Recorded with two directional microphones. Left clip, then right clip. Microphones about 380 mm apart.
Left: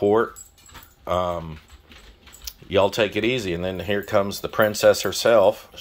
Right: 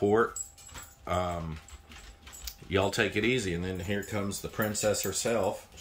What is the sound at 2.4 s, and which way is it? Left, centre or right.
Speech, centre.